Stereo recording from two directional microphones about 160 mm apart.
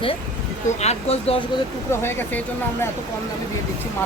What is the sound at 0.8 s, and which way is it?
Speech, 40° left (ahead or behind).